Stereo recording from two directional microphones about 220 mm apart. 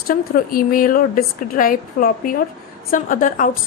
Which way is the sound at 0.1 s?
40° left (ahead or behind).